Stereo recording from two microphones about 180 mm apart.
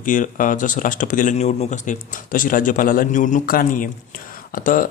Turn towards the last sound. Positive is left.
turn(degrees=50)  # may be behind; listen again after turning